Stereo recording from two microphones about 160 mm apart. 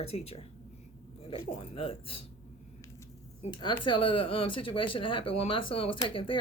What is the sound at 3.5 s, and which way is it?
Speech, 30° left (ahead or behind).